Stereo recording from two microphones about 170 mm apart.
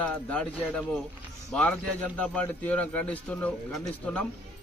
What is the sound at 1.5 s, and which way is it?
A man's voice, 5° left (ahead or behind).